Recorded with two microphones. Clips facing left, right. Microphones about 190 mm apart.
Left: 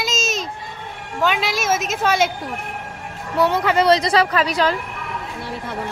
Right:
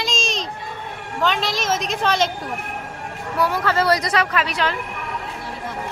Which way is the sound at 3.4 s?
20° left (ahead or behind).